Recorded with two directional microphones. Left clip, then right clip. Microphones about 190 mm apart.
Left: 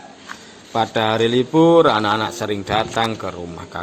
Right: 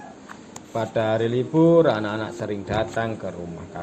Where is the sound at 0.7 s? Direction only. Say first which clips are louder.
Left 5 dB; 45° left (ahead or behind).